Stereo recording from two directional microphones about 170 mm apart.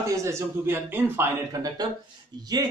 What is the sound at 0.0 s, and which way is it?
Speech, 15° right (ahead or behind).